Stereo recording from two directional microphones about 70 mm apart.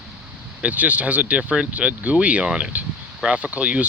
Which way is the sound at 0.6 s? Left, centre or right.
Right.